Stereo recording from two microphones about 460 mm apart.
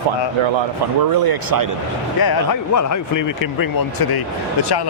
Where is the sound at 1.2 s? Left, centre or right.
Right.